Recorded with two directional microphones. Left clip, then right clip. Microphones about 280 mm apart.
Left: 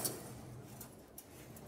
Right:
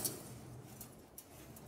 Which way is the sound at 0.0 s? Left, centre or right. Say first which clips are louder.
Left 2 dB; centre.